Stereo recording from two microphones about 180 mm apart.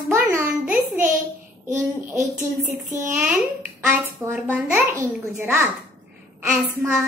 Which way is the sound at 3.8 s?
10° right (ahead or behind).